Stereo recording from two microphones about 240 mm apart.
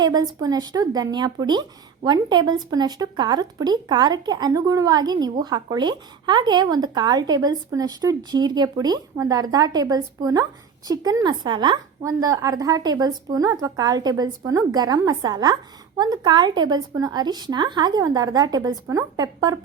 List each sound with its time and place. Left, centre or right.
0.0 s speech: centre